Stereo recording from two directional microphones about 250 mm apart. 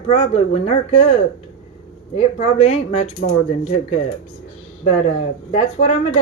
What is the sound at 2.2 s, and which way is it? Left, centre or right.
Speech, left.